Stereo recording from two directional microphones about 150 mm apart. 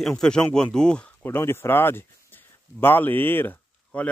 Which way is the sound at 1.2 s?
15° left (ahead or behind).